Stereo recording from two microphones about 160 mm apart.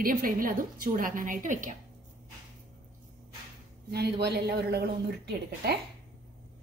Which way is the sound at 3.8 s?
85° right.